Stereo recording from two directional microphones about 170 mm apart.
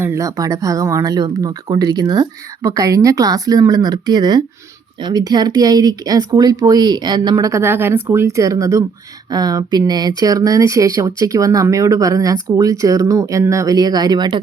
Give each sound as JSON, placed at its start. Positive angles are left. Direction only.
{"t": 0.0, "sound": "speech", "side_deg": -15}